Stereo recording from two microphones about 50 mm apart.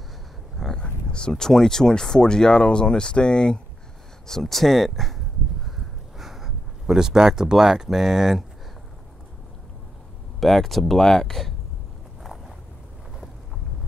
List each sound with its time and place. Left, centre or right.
0.6 s speech: centre
4.3 s a sound: centre
10.4 s speech: centre
12.2 s vehicle: centre